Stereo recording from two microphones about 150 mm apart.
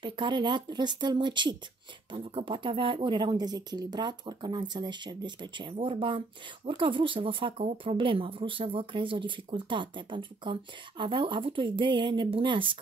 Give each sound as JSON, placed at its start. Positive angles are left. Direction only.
{"t": 0.0, "sound": "speech", "side_deg": -30}